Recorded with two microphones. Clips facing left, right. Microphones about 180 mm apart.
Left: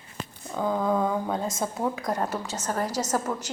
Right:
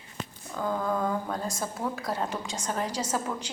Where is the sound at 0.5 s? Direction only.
15° left (ahead or behind).